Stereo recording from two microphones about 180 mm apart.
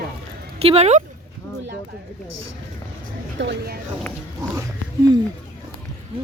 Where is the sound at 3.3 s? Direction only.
65° right (ahead or behind).